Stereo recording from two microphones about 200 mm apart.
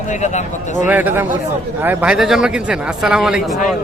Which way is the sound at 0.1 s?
35° left (ahead or behind).